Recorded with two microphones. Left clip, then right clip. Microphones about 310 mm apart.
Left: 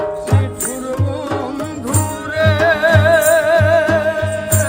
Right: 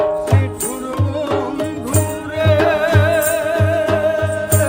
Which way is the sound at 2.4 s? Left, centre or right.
Centre.